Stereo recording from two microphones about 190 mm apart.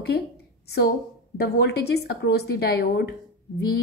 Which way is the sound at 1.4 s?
60° left (ahead or behind).